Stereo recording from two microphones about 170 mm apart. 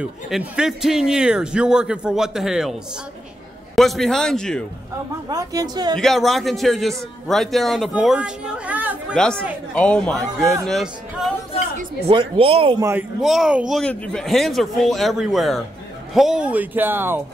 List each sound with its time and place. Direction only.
0.0 s a man's voice: 5° right (ahead or behind)
5.3 s speech: 20° right (ahead or behind)
5.9 s a man's voice: centre (ahead or behind)
9.1 s a man's voice: 5° left (ahead or behind)
12.1 s speech: 30° right (ahead or behind)
13.2 s a man's voice: 5° right (ahead or behind)